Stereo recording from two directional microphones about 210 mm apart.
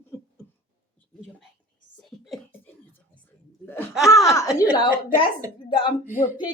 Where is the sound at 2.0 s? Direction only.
Centre (ahead or behind).